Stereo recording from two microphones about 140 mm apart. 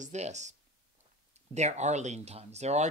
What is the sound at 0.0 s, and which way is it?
Speech, 55° right (ahead or behind).